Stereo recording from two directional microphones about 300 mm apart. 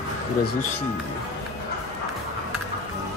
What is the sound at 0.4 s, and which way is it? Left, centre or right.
Speech, left.